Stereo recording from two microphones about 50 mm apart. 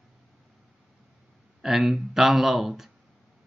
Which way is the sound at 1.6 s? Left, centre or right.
Centre.